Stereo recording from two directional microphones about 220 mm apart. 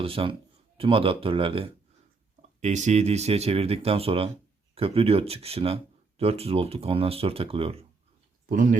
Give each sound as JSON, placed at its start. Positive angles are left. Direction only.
{"t": 0.0, "sound": "speech", "side_deg": -25}
{"t": 8.4, "sound": "speech", "side_deg": -35}